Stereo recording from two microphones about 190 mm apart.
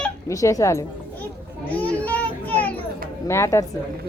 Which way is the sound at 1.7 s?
5° left (ahead or behind).